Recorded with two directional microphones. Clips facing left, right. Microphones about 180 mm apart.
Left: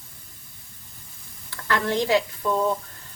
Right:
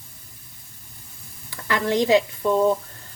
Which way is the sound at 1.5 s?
15° right (ahead or behind).